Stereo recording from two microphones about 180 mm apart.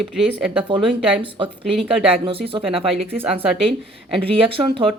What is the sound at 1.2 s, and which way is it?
Speech, 30° right (ahead or behind).